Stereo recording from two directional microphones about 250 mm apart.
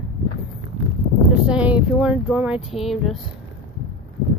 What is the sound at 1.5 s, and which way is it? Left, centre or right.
Speech, centre.